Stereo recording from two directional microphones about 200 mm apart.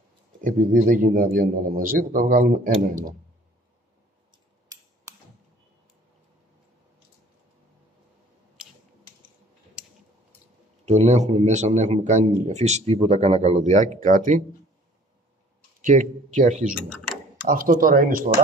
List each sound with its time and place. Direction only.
0.4 s a man's voice: 40° right (ahead or behind)
10.9 s a man's voice: 35° right (ahead or behind)
15.8 s a man's voice: 40° right (ahead or behind)